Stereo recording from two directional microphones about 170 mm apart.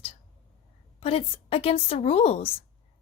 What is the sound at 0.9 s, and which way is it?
A woman's voice, 35° left (ahead or behind).